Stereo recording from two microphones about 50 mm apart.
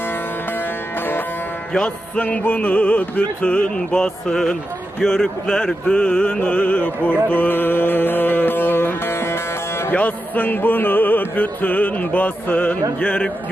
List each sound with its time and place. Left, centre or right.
1.7 s music: left
2.2 s music: left
3.8 s speech: centre
5.0 s music: centre; by 9.9 s left
9.9 s music: left